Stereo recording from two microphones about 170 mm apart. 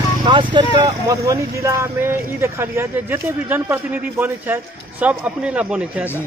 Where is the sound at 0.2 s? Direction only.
30° right (ahead or behind); by 6.0 s 5° right (ahead or behind).